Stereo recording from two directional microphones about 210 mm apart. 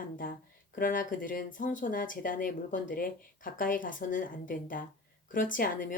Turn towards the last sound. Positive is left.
turn(degrees=40)  # may be behind; listen again after turning